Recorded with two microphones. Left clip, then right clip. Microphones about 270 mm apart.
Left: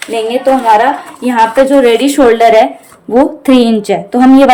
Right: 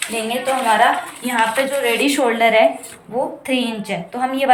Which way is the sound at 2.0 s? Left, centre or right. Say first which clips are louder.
Left 9 dB; left.